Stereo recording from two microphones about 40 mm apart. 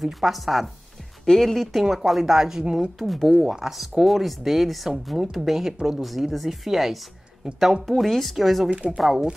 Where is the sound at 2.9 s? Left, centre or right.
Centre.